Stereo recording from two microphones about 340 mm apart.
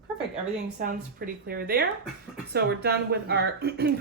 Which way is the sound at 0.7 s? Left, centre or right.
Right.